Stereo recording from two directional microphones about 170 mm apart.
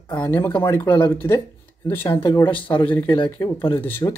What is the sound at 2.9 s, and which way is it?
Speech, 10° left (ahead or behind).